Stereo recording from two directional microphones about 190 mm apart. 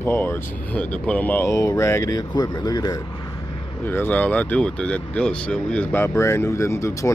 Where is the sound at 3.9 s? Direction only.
10° left (ahead or behind).